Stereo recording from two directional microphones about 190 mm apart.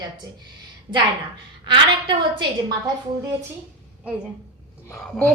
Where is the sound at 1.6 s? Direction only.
25° right (ahead or behind).